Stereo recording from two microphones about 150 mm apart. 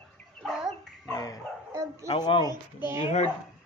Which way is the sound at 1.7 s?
20° right (ahead or behind).